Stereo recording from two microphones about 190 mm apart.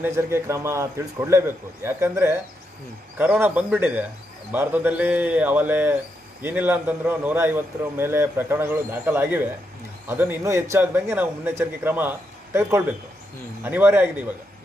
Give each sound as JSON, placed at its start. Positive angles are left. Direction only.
{"t": 0.0, "sound": "a man's voice", "side_deg": -15}